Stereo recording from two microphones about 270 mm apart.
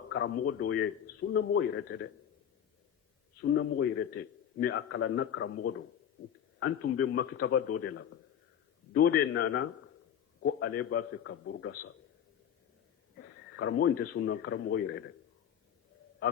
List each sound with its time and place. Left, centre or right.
0.1 s a man's voice: left
3.4 s a man's voice: left
7.3 s a man's voice: left
8.9 s a man's voice: left
9.4 s a man's voice: left
13.6 s a man's voice: left